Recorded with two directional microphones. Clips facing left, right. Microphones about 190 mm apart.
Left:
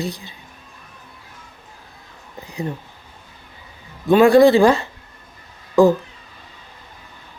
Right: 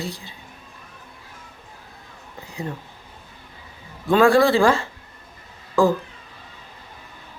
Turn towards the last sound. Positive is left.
turn(degrees=20)  # may be behind; listen again after turning